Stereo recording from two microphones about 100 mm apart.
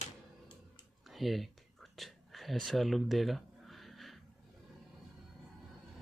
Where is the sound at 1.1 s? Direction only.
Centre (ahead or behind).